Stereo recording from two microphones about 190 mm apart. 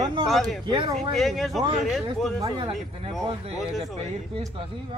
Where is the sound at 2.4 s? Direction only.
25° right (ahead or behind).